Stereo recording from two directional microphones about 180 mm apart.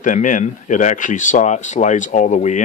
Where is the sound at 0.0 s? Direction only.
45° left (ahead or behind).